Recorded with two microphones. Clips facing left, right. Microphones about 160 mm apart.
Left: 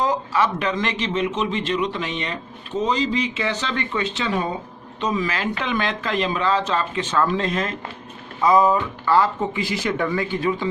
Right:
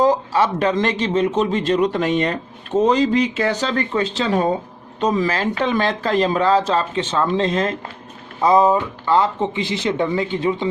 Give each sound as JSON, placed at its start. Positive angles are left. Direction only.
{"t": 0.0, "sound": "a man's voice", "side_deg": -35}